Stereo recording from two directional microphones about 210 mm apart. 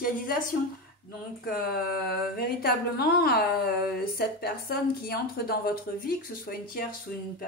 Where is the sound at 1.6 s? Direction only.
45° left (ahead or behind).